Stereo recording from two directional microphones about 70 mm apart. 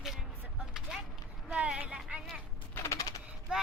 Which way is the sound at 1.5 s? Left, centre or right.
Centre.